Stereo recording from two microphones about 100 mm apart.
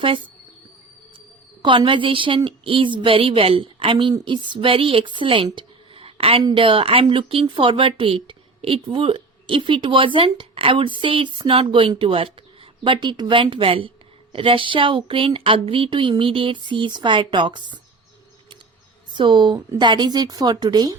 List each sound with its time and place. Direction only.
1.6 s speech: 55° right (ahead or behind); by 6.4 s 70° right (ahead or behind)
6.5 s speech: 60° right (ahead or behind)
12.8 s speech: 50° right (ahead or behind)
19.1 s a woman's voice: 50° right (ahead or behind)